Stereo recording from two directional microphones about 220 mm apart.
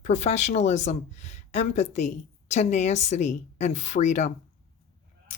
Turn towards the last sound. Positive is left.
turn(degrees=30)  # may be behind; listen again after turning